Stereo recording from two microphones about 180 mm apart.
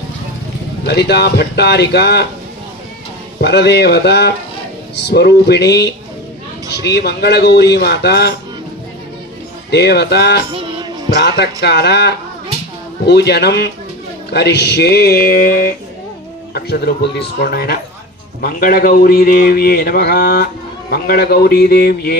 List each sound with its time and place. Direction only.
0.8 s a man's voice: 65° left (ahead or behind)
3.3 s a man's voice: 70° left (ahead or behind)
9.7 s speech: 70° left (ahead or behind)
10.5 s music: 30° right (ahead or behind)
11.2 s a man's voice: 65° left (ahead or behind)